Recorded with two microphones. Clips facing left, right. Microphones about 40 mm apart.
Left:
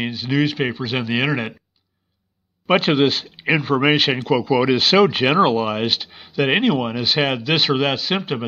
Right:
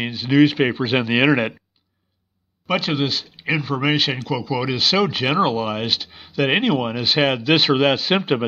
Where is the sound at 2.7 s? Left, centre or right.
Centre.